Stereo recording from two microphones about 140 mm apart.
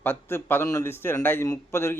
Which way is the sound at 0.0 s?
15° left (ahead or behind).